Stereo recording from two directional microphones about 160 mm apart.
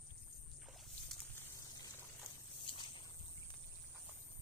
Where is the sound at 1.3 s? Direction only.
20° left (ahead or behind).